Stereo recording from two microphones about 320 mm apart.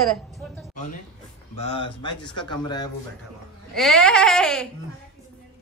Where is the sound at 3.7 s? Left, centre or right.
Centre.